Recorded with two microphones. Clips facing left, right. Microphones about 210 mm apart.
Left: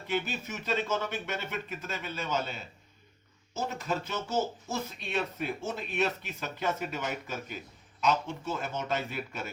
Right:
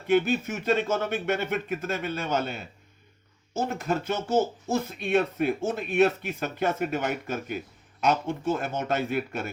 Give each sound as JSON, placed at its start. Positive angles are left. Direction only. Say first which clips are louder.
{"t": 0.1, "sound": "speech", "louder": "right 10 dB", "side_deg": -50}